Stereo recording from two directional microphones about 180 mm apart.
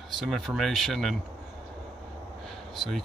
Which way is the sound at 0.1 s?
Centre (ahead or behind).